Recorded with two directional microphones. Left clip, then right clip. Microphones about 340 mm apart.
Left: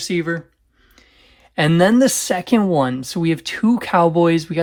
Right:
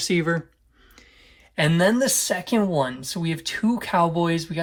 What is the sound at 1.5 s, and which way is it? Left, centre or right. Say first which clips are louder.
Speech: left 5 dB; centre.